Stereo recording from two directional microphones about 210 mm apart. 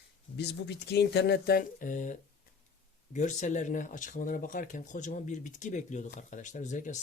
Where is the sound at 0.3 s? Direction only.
55° left (ahead or behind).